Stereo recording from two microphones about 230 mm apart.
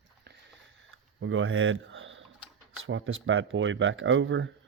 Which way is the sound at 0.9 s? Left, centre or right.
Right.